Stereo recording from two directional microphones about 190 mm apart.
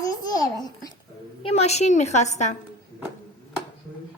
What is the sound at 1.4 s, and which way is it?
A woman's voice, 35° left (ahead or behind).